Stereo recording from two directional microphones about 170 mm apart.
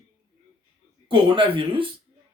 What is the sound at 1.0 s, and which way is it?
Speech, 30° right (ahead or behind).